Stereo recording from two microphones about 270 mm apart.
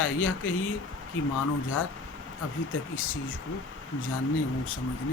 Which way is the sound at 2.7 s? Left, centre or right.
Left.